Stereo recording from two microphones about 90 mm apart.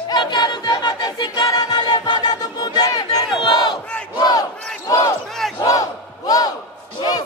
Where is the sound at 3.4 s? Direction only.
55° left (ahead or behind).